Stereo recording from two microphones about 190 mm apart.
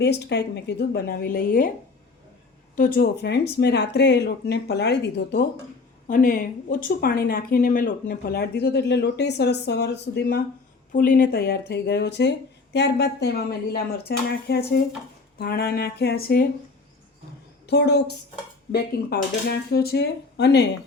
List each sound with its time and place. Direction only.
0.0 s speech: 60° left (ahead or behind)
2.7 s speech: 50° left (ahead or behind)
6.1 s speech: 45° left (ahead or behind)
10.9 s speech: 45° left (ahead or behind)
17.7 s speech: 60° left (ahead or behind)